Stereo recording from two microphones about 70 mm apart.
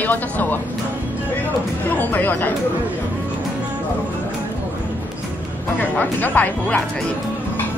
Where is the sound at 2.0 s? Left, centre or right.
Left.